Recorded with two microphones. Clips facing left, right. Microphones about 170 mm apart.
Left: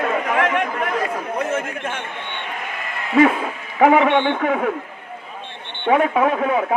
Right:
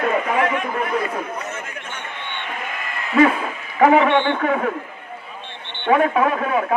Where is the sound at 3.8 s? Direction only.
15° left (ahead or behind).